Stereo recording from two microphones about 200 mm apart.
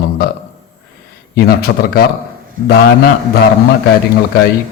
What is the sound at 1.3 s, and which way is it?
Speech, 50° left (ahead or behind).